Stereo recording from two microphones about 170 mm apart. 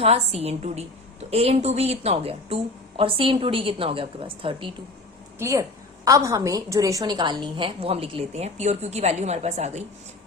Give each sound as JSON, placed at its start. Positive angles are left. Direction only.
{"t": 0.0, "sound": "a woman's voice", "side_deg": -35}
{"t": 5.4, "sound": "a woman's voice", "side_deg": -15}